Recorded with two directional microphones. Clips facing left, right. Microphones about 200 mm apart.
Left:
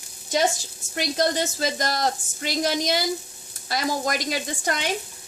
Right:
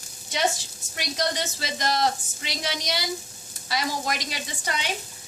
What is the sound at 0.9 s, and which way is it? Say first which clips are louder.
Speech: left 5 dB; 50° left (ahead or behind).